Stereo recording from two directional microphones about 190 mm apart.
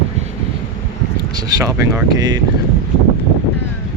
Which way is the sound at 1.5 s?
15° right (ahead or behind).